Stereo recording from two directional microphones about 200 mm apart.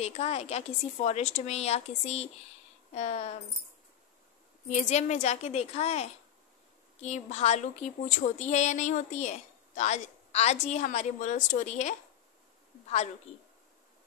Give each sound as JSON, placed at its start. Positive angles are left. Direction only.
{"t": 0.0, "sound": "a woman's voice", "side_deg": 30}
{"t": 4.6, "sound": "a woman's voice", "side_deg": 35}